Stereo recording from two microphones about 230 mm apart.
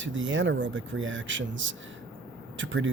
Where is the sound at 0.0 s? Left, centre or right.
Right.